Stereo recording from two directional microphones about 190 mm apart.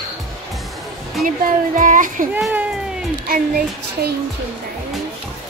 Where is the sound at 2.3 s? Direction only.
10° right (ahead or behind).